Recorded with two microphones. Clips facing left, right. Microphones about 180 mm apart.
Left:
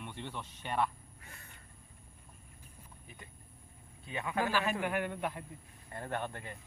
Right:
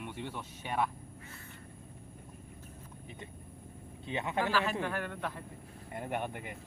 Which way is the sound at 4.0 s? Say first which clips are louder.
Right 1 dB; 25° right (ahead or behind).